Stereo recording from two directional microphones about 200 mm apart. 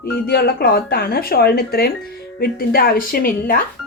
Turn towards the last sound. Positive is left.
turn(degrees=45)  # may be behind; listen again after turning